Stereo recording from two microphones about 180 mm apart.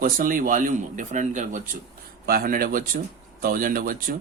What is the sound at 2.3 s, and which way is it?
Speech, 55° right (ahead or behind).